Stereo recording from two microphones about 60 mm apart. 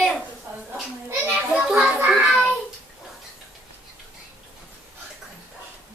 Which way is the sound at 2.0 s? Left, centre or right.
Centre.